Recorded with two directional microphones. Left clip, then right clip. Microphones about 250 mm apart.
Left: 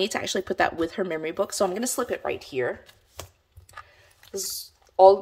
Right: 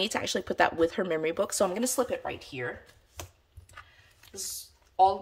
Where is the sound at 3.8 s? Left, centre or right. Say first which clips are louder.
Left 5 dB; left.